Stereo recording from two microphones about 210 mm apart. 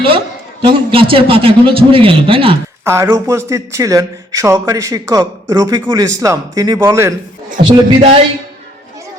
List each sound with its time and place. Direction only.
0.6 s a man's voice: 25° right (ahead or behind)
2.8 s speech: 15° right (ahead or behind)
7.6 s a man's voice: 25° right (ahead or behind)